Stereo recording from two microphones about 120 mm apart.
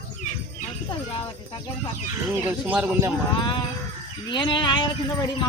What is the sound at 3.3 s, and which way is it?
Speech, 40° left (ahead or behind).